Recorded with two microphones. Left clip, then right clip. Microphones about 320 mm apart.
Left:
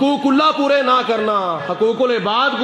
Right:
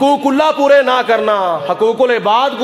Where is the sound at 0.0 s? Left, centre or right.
Right.